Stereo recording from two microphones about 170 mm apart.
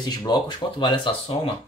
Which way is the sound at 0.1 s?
25° left (ahead or behind).